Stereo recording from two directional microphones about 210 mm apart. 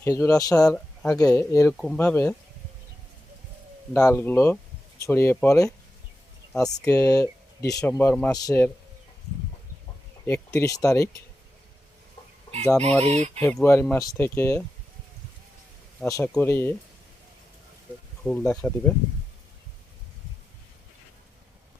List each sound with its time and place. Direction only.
0.0 s speech: 10° left (ahead or behind)
3.9 s speech: 15° left (ahead or behind)
10.2 s speech: 15° left (ahead or behind)
13.1 s speech: 30° right (ahead or behind)
13.4 s speech: 10° left (ahead or behind)
16.0 s speech: 15° left (ahead or behind)
18.3 s speech: 5° left (ahead or behind)